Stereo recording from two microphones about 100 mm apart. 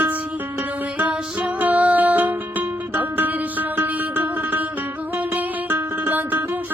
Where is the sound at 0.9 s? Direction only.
15° right (ahead or behind).